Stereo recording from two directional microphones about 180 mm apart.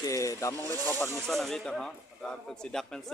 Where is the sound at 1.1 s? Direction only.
Centre (ahead or behind).